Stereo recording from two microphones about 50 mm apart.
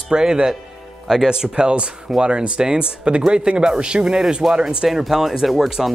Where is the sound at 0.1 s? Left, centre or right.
Centre.